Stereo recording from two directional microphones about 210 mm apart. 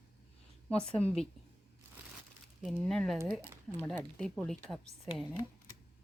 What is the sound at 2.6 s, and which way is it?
Speech, centre (ahead or behind).